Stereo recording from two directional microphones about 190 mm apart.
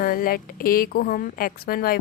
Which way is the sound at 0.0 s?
50° left (ahead or behind).